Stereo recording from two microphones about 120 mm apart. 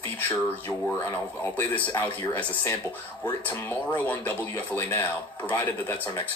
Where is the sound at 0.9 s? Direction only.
15° left (ahead or behind).